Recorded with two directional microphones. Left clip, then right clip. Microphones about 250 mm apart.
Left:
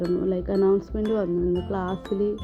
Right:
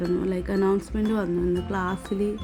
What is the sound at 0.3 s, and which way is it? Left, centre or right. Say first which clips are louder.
Speech: left 5 dB; centre.